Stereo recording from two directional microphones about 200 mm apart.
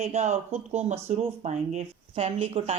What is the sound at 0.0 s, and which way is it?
Speech, 35° right (ahead or behind).